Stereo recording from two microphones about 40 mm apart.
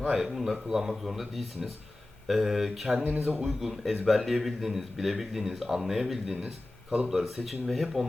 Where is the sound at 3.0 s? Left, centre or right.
Right.